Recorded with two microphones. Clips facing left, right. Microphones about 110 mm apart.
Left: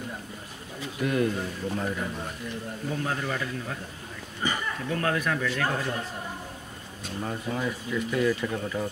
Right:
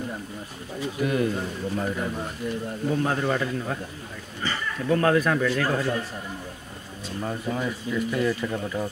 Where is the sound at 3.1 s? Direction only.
40° right (ahead or behind).